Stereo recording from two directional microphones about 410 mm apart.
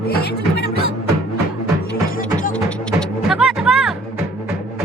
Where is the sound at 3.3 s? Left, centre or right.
Centre.